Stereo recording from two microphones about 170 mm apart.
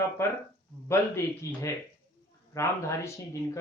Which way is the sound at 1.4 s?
15° left (ahead or behind).